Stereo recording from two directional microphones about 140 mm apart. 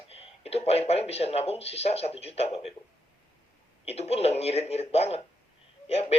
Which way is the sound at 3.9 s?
50° left (ahead or behind).